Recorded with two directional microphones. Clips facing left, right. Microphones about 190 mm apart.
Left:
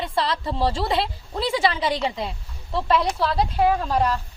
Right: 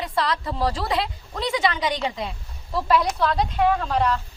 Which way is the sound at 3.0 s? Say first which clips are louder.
Left 1 dB; 5° left (ahead or behind).